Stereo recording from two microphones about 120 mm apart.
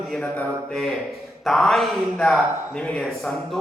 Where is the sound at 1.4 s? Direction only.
Centre (ahead or behind).